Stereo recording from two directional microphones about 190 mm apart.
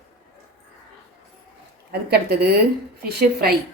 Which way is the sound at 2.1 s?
55° right (ahead or behind).